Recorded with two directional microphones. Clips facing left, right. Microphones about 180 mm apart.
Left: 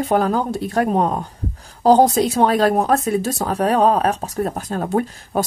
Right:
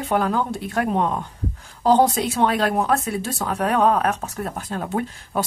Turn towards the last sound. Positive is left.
turn(degrees=40)  # may be behind; listen again after turning